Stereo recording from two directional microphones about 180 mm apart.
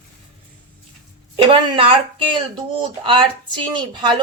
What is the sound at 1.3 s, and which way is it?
A woman's voice, 30° right (ahead or behind).